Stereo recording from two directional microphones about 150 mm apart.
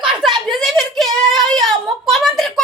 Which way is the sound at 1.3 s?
Centre (ahead or behind).